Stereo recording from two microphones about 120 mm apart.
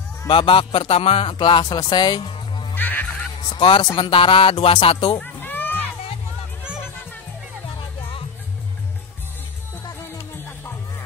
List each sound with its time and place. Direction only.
0.3 s speech: 45° left (ahead or behind)
2.7 s music: 15° left (ahead or behind)
3.4 s speech: 45° left (ahead or behind)
5.2 s a sound: 15° left (ahead or behind)
10.3 s music: 20° left (ahead or behind)